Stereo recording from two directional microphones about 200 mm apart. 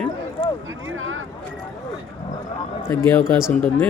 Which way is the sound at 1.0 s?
80° right.